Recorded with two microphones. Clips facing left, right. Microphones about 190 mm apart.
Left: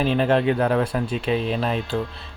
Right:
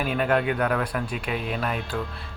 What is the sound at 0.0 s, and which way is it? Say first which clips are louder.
Speech: left 4 dB; 30° left (ahead or behind).